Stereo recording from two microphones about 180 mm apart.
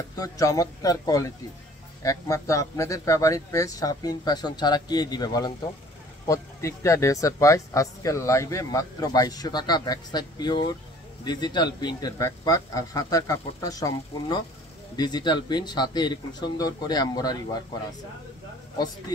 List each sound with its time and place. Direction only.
0.1 s speech: 20° left (ahead or behind)